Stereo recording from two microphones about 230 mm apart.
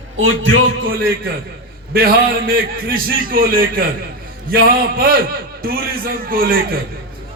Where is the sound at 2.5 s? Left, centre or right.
Right.